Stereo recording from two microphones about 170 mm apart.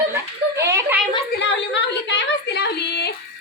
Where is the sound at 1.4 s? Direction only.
90° left; by 3.1 s 75° left (ahead or behind).